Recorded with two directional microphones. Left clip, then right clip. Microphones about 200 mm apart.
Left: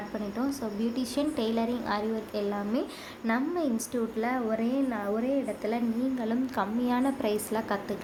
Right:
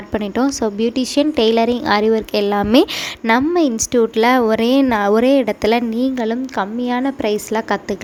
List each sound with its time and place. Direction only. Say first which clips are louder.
0.1 s a woman's voice: right 16 dB; 45° right (ahead or behind)